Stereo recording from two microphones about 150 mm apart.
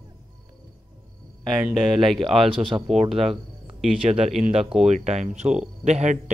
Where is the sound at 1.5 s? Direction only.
5° right (ahead or behind).